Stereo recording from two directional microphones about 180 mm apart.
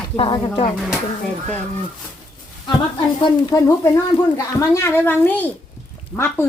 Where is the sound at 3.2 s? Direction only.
20° left (ahead or behind).